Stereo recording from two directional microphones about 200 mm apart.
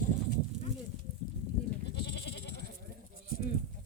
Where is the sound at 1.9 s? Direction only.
60° left (ahead or behind).